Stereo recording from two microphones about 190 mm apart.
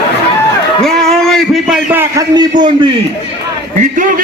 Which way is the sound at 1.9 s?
15° right (ahead or behind).